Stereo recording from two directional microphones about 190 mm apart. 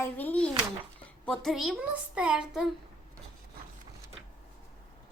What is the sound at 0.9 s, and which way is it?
A child's voice, 5° left (ahead or behind).